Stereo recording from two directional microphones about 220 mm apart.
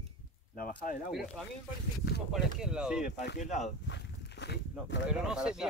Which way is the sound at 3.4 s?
30° left (ahead or behind).